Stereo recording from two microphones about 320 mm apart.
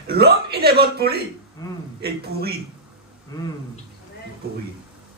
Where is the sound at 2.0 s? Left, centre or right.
Right.